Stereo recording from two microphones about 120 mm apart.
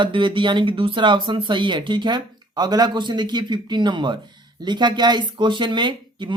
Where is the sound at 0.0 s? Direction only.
40° right (ahead or behind).